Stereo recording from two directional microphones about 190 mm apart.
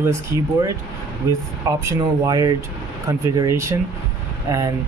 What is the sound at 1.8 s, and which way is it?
Speech, 20° right (ahead or behind).